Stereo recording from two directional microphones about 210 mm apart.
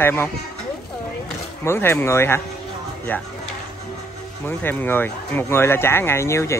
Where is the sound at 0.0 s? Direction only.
10° left (ahead or behind).